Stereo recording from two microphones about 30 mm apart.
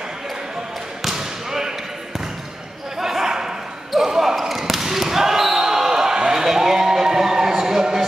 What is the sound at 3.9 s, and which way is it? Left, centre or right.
Basketball bounce, centre.